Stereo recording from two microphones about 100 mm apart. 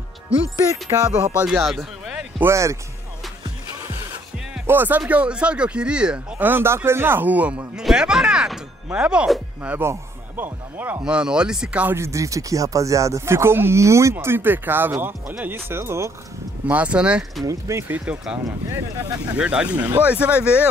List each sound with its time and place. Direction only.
1.0 s speech: 10° right (ahead or behind)
1.6 s a sound: centre (ahead or behind)
2.4 s speech: 30° right (ahead or behind)
4.6 s speech: 20° right (ahead or behind)
11.9 s speech: 30° right (ahead or behind)
16.6 s speech: 15° right (ahead or behind)
17.5 s speech: 30° right (ahead or behind)
17.9 s speech: 10° right (ahead or behind)